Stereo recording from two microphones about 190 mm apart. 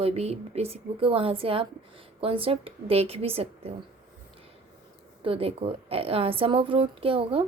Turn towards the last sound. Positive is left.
turn(degrees=-30)  # may be behind; listen again after turning